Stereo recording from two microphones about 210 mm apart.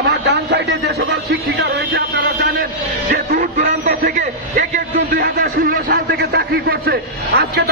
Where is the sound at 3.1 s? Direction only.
45° right (ahead or behind).